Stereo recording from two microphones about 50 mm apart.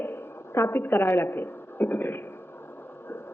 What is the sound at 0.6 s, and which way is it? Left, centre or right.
A woman's voice, left.